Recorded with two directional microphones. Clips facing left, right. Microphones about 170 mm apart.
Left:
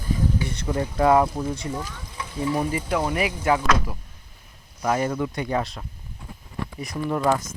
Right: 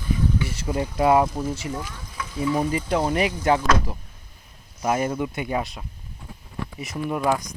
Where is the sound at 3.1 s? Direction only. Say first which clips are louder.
Right 2 dB; 30° right (ahead or behind).